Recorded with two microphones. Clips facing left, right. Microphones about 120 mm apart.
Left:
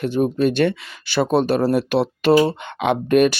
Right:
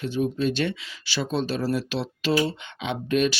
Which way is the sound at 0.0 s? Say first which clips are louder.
Left 6 dB; 60° left (ahead or behind).